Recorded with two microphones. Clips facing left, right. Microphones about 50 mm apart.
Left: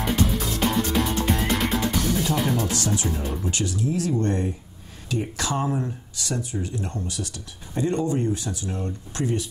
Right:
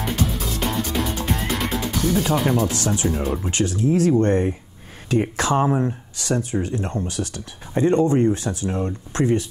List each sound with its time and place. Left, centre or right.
0.0 s music: centre
2.3 s speech: centre
3.4 s speech: right